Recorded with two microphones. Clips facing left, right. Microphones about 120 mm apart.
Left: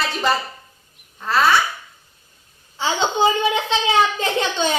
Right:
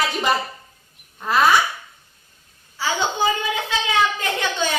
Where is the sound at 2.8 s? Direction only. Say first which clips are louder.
Left 3 dB; 25° left (ahead or behind).